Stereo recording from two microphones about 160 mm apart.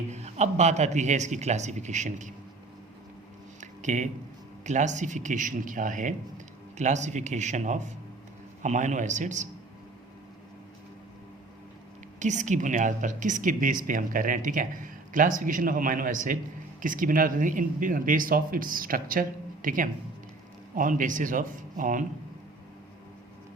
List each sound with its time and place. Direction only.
0.1 s speech: 45° right (ahead or behind)
3.6 s a sound: 50° right (ahead or behind)
4.6 s speech: 50° right (ahead or behind)
12.2 s speech: 50° right (ahead or behind)